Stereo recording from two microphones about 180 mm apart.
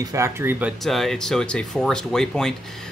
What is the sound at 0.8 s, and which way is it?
Speech, centre (ahead or behind).